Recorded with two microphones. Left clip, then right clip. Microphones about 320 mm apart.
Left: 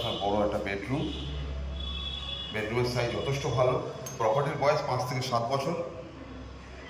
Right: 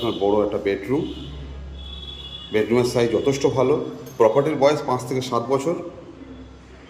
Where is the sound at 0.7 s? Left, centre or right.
Centre.